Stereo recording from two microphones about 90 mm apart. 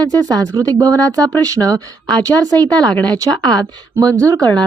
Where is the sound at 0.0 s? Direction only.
45° right (ahead or behind).